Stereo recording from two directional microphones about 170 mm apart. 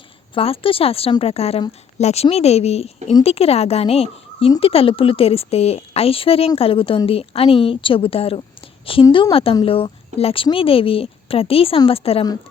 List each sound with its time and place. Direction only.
0.3 s a woman's voice: 35° left (ahead or behind)
9.0 s a woman's voice: 20° left (ahead or behind)
9.3 s a woman's voice: 35° left (ahead or behind)